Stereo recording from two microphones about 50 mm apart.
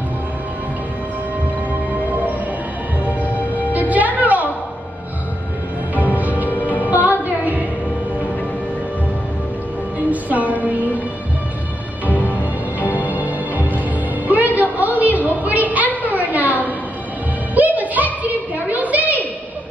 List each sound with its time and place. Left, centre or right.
1.7 s music: right
3.9 s music: right
5.9 s music: right
9.9 s music: right
12.1 s music: left
13.0 s music: right
14.8 s a sound: right
17.6 s a sound: right